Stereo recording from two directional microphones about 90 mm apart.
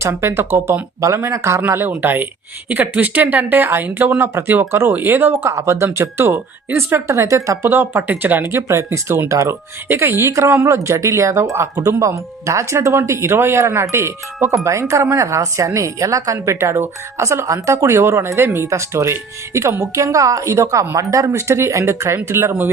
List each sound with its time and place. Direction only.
0.0 s speech: 30° right (ahead or behind)
7.7 s speech: 25° right (ahead or behind)